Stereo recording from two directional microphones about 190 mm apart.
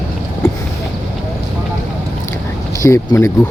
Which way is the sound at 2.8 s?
15° left (ahead or behind).